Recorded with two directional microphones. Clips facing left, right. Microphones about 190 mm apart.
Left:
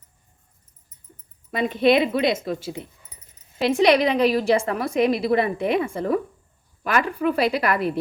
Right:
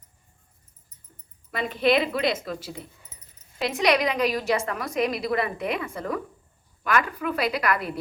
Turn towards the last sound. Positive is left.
turn(degrees=30)  # may be behind; listen again after turning